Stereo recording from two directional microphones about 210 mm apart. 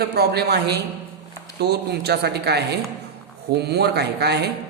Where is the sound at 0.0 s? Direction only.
50° right (ahead or behind).